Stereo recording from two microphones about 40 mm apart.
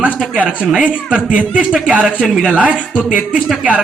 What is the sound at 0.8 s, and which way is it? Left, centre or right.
Speech, right.